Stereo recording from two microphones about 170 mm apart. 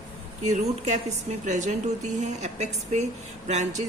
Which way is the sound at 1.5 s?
45° right (ahead or behind).